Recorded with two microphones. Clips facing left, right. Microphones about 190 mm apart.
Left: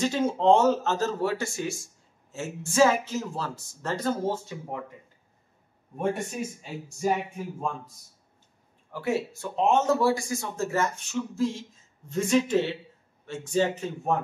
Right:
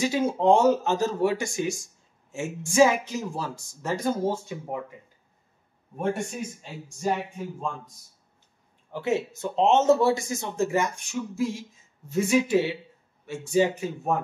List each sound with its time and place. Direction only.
0.0 s speech: 10° right (ahead or behind)
5.9 s speech: 5° left (ahead or behind)
8.9 s a man's voice: 20° right (ahead or behind)